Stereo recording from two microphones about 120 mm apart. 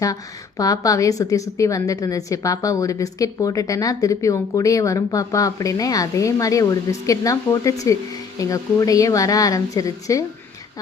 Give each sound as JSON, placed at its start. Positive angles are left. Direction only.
{"t": 0.0, "sound": "speech", "side_deg": 30}